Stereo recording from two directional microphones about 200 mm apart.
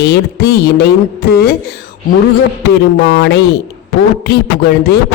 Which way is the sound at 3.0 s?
60° left (ahead or behind).